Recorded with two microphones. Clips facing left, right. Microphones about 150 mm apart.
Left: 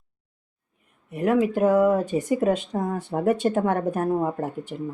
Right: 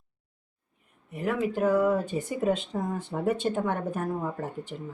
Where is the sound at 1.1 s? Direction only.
75° left (ahead or behind).